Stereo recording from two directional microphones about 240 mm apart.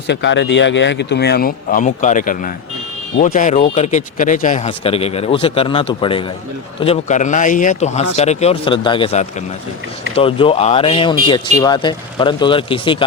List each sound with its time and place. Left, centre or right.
0.1 s speech: left